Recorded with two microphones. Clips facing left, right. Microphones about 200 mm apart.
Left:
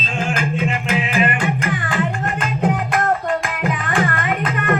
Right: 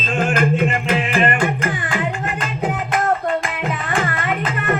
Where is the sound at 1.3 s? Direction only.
40° right (ahead or behind).